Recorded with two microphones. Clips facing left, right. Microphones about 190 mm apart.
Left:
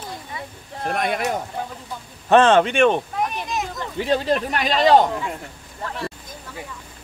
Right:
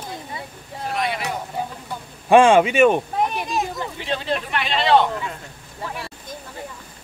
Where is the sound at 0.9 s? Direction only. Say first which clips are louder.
Left 3 dB; 50° left (ahead or behind).